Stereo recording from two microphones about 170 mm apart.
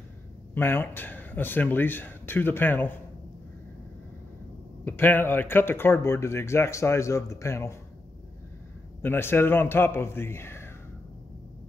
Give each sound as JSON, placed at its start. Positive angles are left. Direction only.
{"t": 0.6, "sound": "speech", "side_deg": 10}
{"t": 4.8, "sound": "speech", "side_deg": 10}
{"t": 9.0, "sound": "speech", "side_deg": 15}